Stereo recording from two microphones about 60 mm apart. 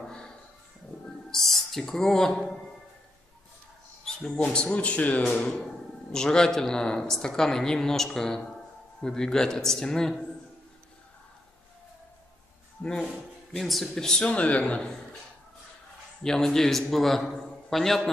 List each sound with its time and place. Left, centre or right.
1.3 s speech: centre
4.4 s a man's voice: centre
5.4 s speech: centre
13.6 s speech: centre
14.3 s a man's voice: left
16.2 s a man's voice: centre